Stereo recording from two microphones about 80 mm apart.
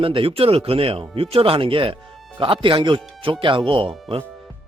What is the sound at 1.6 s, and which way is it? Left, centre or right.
Speech, right.